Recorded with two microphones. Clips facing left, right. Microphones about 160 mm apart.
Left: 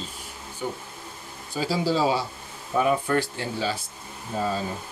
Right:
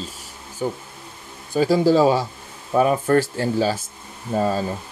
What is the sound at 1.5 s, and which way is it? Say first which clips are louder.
Speech: right 9 dB; 50° right (ahead or behind).